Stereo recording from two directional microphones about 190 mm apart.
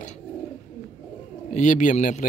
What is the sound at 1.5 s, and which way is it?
Speech, 40° left (ahead or behind).